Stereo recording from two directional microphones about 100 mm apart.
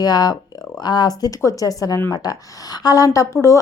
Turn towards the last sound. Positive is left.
turn(degrees=35)  # may be behind; listen again after turning